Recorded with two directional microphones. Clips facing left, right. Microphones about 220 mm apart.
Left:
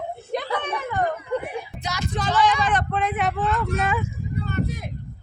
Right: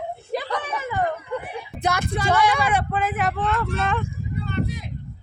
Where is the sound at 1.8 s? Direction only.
55° right (ahead or behind).